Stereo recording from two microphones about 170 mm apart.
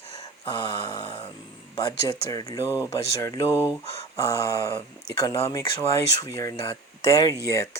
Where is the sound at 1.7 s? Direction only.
20° left (ahead or behind).